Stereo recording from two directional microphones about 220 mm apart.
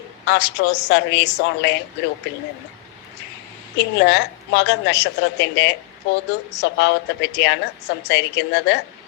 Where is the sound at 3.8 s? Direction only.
50° left (ahead or behind).